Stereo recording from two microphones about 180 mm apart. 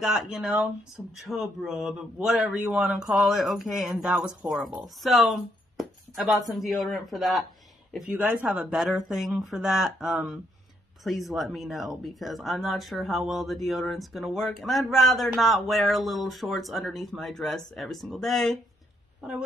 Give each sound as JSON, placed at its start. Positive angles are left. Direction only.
{"t": 0.0, "sound": "speech", "side_deg": -5}